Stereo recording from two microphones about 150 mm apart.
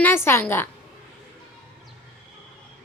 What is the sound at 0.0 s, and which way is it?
Speech, 15° left (ahead or behind).